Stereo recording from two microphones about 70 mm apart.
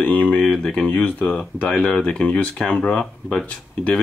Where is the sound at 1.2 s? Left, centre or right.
Centre.